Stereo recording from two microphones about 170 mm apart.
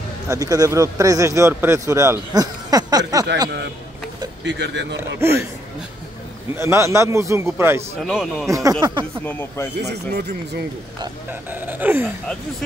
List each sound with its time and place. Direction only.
0.3 s speech: 20° right (ahead or behind)
4.5 s speech: 90° right
5.2 s a man's voice: 15° right (ahead or behind)
6.5 s a man's voice: 15° right (ahead or behind)
8.0 s a man's voice: centre (ahead or behind)
8.5 s speech: 20° right (ahead or behind)
9.2 s speech: 10° left (ahead or behind)
9.8 s speech: 70° right (ahead or behind)
11.5 s a man's voice: 10° right (ahead or behind)